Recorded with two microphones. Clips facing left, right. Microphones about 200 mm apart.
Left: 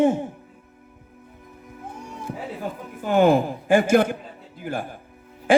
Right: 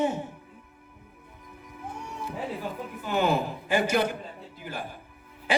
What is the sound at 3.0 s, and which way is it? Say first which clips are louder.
Speech: left 8 dB; 50° left (ahead or behind).